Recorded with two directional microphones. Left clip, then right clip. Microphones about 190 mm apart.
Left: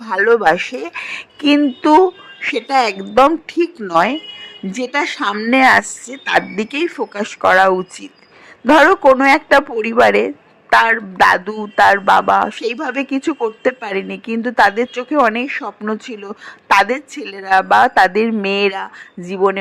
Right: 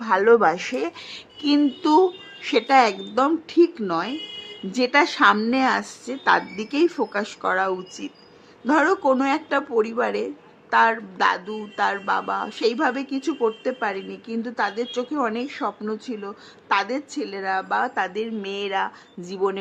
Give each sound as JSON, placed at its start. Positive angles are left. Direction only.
{"t": 0.2, "sound": "a man's voice", "side_deg": 25}
{"t": 5.1, "sound": "speech", "side_deg": 0}
{"t": 5.5, "sound": "a man's voice", "side_deg": 30}
{"t": 19.2, "sound": "speech", "side_deg": 25}